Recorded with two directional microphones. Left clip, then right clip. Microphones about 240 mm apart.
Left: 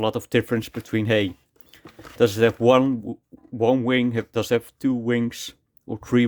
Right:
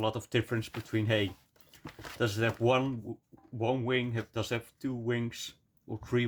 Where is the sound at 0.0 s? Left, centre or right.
Left.